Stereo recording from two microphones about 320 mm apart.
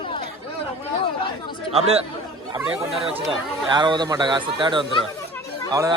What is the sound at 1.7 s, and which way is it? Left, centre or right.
Speech, centre.